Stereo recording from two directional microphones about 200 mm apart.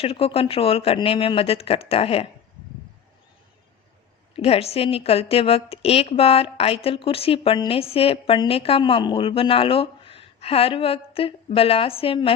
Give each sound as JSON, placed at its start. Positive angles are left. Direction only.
{"t": 0.0, "sound": "speech", "side_deg": 30}
{"t": 4.4, "sound": "speech", "side_deg": 30}